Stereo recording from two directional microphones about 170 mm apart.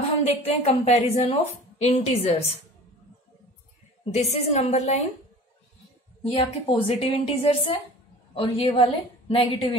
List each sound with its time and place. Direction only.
0.2 s a woman's voice: 35° left (ahead or behind)
4.0 s a woman's voice: 40° left (ahead or behind)
6.3 s a woman's voice: 35° left (ahead or behind)